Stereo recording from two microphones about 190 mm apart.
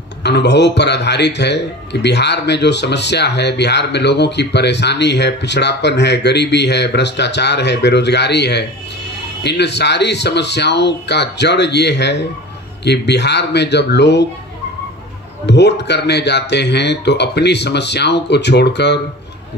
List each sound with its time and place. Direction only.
0.2 s speech: 65° left (ahead or behind)
15.4 s speech: 65° left (ahead or behind)